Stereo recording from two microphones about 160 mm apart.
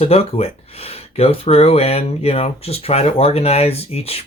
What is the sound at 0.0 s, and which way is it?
Speech, 40° left (ahead or behind).